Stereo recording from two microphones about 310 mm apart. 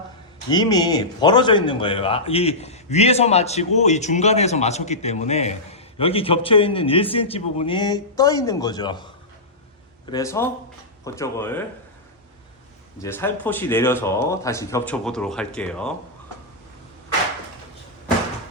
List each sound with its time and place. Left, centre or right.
0.5 s speech: centre
10.1 s speech: centre
13.0 s speech: centre